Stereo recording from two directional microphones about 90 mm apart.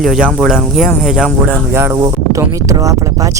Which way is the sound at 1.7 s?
25° right (ahead or behind).